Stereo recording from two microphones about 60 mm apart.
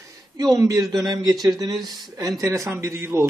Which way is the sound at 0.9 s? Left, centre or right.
Right.